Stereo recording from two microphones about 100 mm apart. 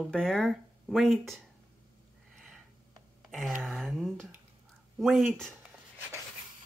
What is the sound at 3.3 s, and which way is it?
Speech, centre (ahead or behind).